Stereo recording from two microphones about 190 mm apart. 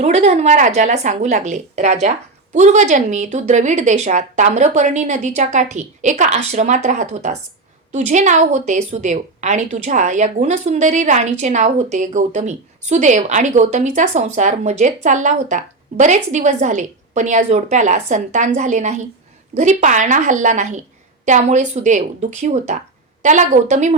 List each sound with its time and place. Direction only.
0.0 s a woman's voice: 35° right (ahead or behind)